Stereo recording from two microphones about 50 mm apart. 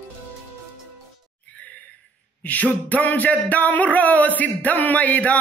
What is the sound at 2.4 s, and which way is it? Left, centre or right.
Speech, left.